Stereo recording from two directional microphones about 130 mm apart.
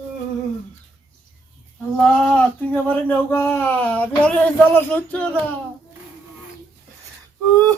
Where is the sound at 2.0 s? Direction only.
5° left (ahead or behind).